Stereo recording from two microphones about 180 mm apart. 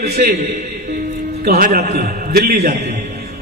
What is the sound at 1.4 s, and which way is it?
A man's voice, 60° right (ahead or behind).